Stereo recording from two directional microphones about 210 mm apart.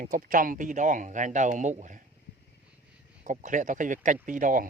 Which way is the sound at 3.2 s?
35° right (ahead or behind).